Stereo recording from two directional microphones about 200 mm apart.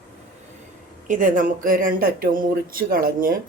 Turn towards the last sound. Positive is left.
turn(degrees=-45)  # may be behind; listen again after turning